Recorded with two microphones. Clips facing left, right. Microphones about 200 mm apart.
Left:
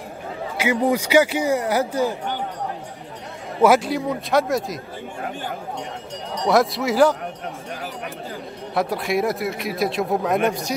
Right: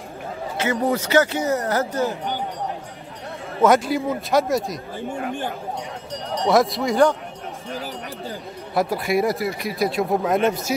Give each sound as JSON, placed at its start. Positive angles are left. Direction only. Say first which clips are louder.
{"t": 0.6, "sound": "a man's voice", "louder": "left 2 dB", "side_deg": 10}
{"t": 3.6, "sound": "speech", "louder": "left 1 dB", "side_deg": 0}
{"t": 6.4, "sound": "speech", "louder": "even", "side_deg": 0}
{"t": 8.7, "sound": "speech", "louder": "right 1 dB", "side_deg": 0}